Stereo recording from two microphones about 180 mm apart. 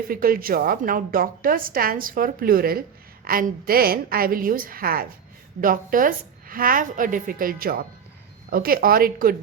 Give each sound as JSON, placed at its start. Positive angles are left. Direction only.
{"t": 0.1, "sound": "a woman's voice", "side_deg": -55}